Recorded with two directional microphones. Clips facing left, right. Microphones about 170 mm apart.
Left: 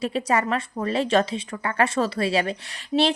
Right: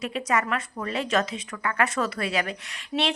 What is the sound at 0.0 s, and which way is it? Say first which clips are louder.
A woman's voice: left 3 dB; 30° left (ahead or behind).